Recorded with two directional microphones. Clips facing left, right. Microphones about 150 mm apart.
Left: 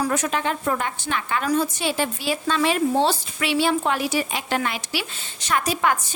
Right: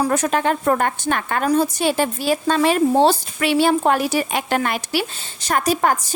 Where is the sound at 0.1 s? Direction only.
40° right (ahead or behind).